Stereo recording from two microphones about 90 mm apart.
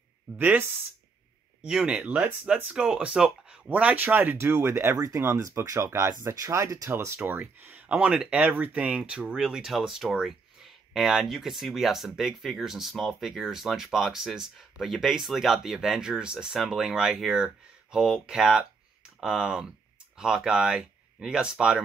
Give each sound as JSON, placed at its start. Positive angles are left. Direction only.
{"t": 0.4, "sound": "speech", "side_deg": -20}
{"t": 1.6, "sound": "speech", "side_deg": -5}
{"t": 7.2, "sound": "speech", "side_deg": -20}